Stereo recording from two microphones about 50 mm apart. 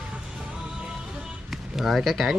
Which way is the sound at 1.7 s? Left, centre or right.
Centre.